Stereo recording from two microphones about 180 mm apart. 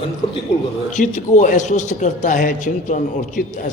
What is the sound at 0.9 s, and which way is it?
A man's voice, 45° left (ahead or behind).